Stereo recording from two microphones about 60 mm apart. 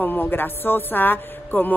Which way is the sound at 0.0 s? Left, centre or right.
Left.